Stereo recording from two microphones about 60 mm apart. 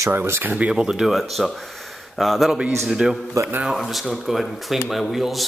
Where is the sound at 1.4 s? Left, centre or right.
Centre.